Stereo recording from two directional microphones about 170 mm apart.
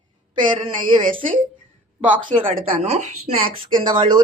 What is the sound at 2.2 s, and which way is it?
Speech, 30° right (ahead or behind).